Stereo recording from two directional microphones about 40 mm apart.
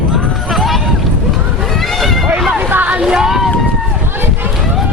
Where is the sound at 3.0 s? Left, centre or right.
Centre.